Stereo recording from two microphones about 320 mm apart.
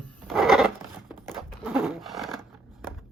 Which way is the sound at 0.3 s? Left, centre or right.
Centre.